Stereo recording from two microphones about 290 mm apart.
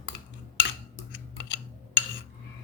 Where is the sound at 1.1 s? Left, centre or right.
Left.